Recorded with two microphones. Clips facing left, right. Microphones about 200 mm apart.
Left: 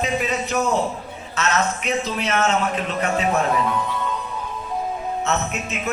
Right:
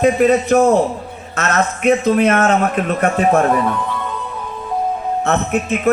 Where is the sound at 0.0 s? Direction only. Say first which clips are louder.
Right 11 dB; 55° right (ahead or behind).